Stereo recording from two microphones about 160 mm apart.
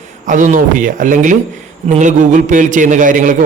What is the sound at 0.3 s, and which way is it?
A man's voice, 55° right (ahead or behind).